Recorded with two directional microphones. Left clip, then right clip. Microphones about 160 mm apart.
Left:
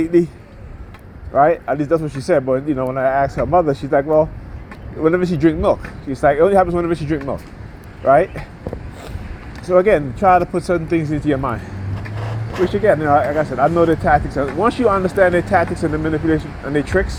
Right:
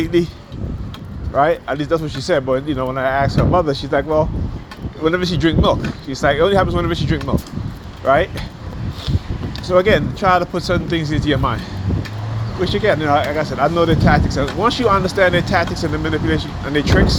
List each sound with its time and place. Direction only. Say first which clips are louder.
0.0 s speech: left 2 dB; 65° left (ahead or behind)
1.3 s speech: left 2 dB; 60° left (ahead or behind)
9.6 s speech: left 1 dB; 60° left (ahead or behind)
12.6 s speech: left 2 dB; 60° left (ahead or behind)